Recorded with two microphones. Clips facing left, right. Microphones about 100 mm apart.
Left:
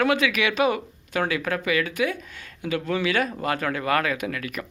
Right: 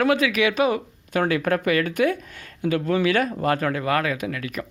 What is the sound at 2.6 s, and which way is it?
Speech, 40° right (ahead or behind).